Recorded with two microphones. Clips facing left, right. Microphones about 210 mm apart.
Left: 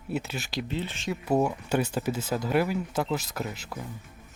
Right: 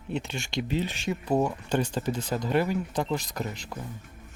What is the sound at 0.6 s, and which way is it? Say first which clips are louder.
Speech: right 3 dB; 15° right (ahead or behind).